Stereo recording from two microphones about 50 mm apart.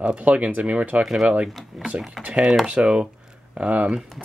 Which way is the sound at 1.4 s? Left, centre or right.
Centre.